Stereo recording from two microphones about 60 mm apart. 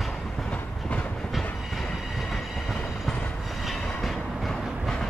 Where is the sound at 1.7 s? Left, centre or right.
Centre.